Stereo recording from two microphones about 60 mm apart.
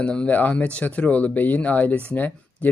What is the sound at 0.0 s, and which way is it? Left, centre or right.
Speech, centre.